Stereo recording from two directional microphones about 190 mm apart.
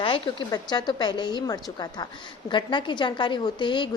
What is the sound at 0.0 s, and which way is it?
A woman's voice, 25° left (ahead or behind).